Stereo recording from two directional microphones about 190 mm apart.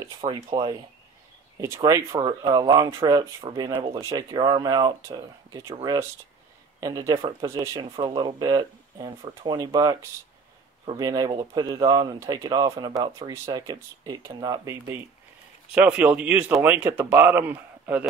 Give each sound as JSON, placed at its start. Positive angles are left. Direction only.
{"t": 0.0, "sound": "speech", "side_deg": -25}
{"t": 6.8, "sound": "speech", "side_deg": -20}